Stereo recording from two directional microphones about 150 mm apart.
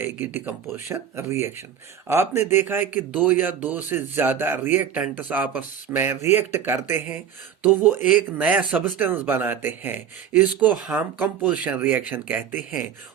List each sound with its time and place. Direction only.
0.0 s speech: 15° right (ahead or behind)